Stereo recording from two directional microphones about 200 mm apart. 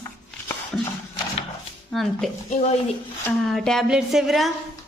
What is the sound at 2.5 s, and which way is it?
Speech, 35° left (ahead or behind).